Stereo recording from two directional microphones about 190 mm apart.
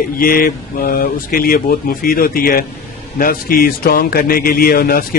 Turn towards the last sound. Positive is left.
turn(degrees=50)  # may be behind; listen again after turning